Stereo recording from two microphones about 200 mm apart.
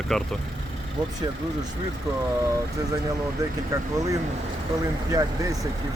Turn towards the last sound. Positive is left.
turn(degrees=-20)  # may be behind; listen again after turning